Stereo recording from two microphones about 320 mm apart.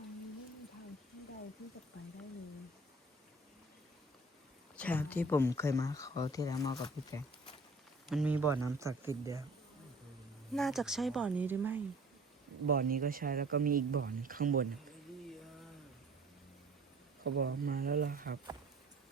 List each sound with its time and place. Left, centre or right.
4.8 s speech: centre
8.1 s speech: centre
10.5 s speech: centre
12.6 s speech: right
17.2 s speech: right